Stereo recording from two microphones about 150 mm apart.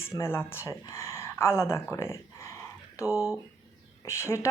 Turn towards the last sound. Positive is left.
turn(degrees=20)  # may be behind; listen again after turning